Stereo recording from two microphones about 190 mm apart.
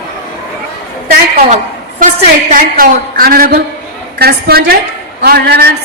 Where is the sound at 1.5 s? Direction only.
35° right (ahead or behind).